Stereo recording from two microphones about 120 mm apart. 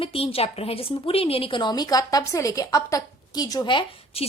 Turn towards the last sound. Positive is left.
turn(degrees=40)  # may be behind; listen again after turning